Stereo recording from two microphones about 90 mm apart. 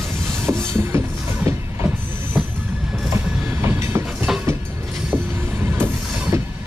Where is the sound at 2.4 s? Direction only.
5° right (ahead or behind).